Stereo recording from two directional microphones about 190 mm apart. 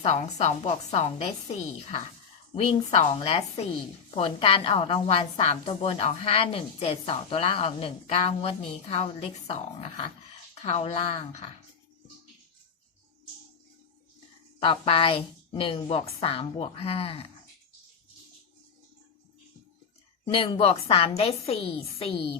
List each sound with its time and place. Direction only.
0.0 s a woman's voice: 35° left (ahead or behind)
14.6 s a woman's voice: 30° left (ahead or behind)
20.2 s a woman's voice: 30° left (ahead or behind)